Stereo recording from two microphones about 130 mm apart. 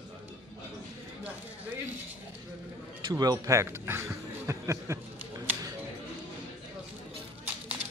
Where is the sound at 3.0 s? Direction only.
30° right (ahead or behind).